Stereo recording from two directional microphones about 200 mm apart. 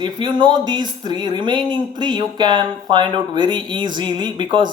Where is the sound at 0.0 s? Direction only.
25° right (ahead or behind).